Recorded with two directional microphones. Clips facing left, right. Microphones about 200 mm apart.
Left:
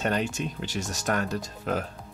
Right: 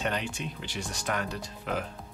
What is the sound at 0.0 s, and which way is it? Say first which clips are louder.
Speech: left 5 dB; 45° left (ahead or behind).